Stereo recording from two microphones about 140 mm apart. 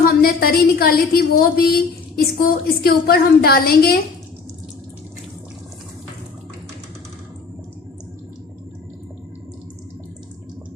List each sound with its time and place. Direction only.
0.0 s a woman's voice: 90° left